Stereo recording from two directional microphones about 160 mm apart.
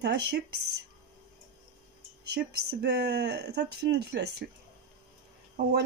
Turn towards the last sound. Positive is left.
turn(degrees=-90)